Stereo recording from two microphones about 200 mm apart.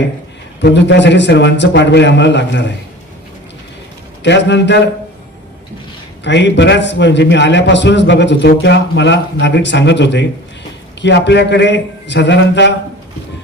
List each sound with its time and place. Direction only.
0.6 s a man's voice: 60° left (ahead or behind)
4.2 s a man's voice: 60° left (ahead or behind)
6.2 s a man's voice: 60° left (ahead or behind)